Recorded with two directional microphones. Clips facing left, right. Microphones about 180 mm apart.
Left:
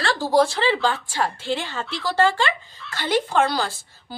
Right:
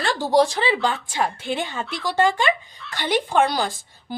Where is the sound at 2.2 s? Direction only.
15° right (ahead or behind).